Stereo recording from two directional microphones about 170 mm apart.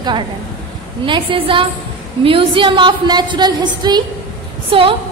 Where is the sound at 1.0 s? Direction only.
30° right (ahead or behind).